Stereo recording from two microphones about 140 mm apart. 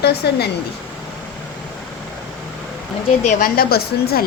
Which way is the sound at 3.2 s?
90° left.